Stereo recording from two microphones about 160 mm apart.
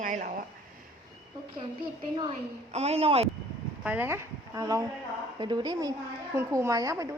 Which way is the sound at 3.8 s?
15° right (ahead or behind).